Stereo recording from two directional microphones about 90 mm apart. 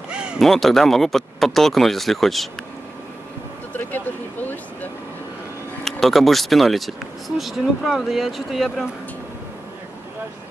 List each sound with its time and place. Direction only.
0.1 s a sound: 10° right (ahead or behind)
0.4 s speech: centre (ahead or behind)
3.7 s speech: 20° left (ahead or behind)
5.9 s speech: centre (ahead or behind)